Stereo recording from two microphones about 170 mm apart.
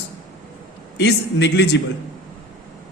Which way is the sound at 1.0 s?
85° left.